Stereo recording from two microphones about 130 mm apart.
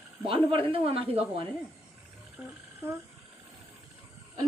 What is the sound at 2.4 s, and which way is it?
Child singing, 10° right (ahead or behind).